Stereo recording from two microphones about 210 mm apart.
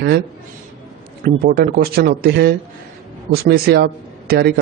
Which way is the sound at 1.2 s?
45° right (ahead or behind).